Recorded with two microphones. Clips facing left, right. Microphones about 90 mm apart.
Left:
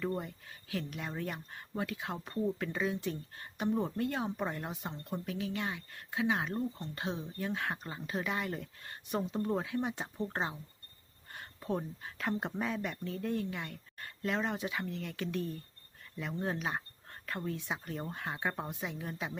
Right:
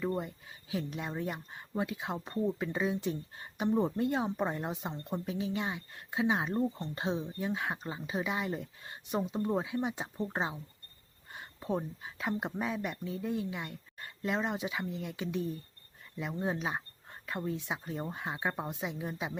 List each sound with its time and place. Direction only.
0.0 s speech: 15° right (ahead or behind)